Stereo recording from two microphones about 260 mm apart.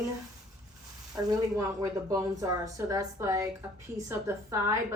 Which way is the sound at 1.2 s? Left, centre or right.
Centre.